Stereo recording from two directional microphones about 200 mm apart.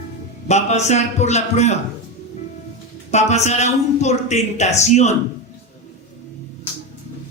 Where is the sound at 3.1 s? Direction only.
35° left (ahead or behind).